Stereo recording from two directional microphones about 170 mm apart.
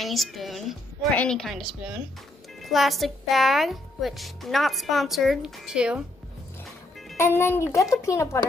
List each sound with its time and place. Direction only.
0.0 s a woman's voice: centre (ahead or behind)
7.2 s a woman's voice: 15° left (ahead or behind)